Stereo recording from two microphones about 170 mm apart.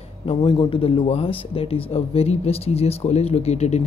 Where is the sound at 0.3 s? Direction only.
25° left (ahead or behind).